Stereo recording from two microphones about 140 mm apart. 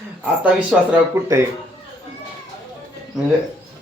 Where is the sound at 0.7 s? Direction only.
10° right (ahead or behind).